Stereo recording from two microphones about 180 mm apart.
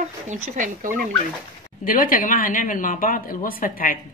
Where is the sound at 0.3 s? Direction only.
45° right (ahead or behind).